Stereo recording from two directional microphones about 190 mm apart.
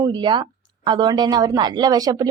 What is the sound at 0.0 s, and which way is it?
A woman's voice, 25° right (ahead or behind).